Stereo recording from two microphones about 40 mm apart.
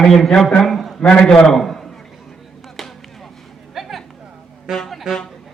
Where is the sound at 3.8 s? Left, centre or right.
Centre.